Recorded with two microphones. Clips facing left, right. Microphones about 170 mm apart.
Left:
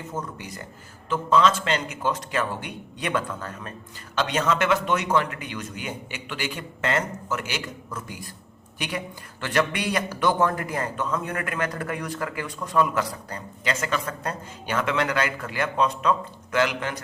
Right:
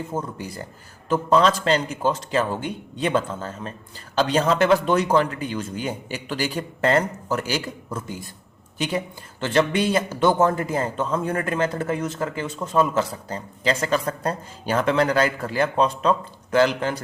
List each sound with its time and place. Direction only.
0.1 s speech: 30° right (ahead or behind)
9.4 s a man's voice: 25° right (ahead or behind)